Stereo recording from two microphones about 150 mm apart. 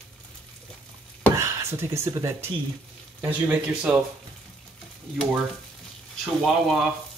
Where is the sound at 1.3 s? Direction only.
20° right (ahead or behind).